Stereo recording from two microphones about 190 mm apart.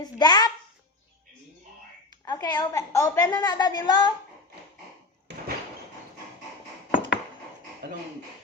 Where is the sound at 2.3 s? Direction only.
20° left (ahead or behind).